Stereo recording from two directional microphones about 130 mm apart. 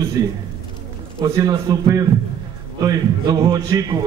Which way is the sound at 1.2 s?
25° right (ahead or behind).